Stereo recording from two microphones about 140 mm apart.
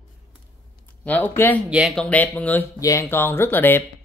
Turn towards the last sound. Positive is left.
turn(degrees=15)  # may be behind; listen again after turning